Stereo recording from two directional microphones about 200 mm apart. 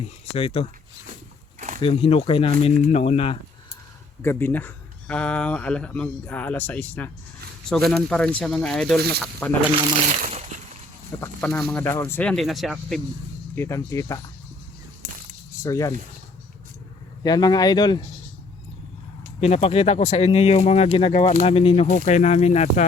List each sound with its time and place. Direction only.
0.3 s speech: 25° left (ahead or behind)
1.5 s a sound: 40° right (ahead or behind)
1.8 s speech: 30° left (ahead or behind)
4.2 s speech: 10° left (ahead or behind)
9.0 s speech: 55° right (ahead or behind)
9.2 s speech: 10° left (ahead or behind)
11.2 s speech: 10° left (ahead or behind)
13.6 s speech: 15° left (ahead or behind)
15.6 s speech: 15° left (ahead or behind)
17.2 s speech: 20° left (ahead or behind)
19.4 s speech: 30° left (ahead or behind)